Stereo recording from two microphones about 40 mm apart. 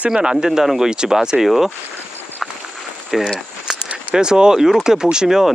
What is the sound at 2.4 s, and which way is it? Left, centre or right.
Walk, centre.